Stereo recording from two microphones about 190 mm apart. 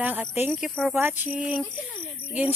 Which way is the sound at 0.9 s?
10° right (ahead or behind).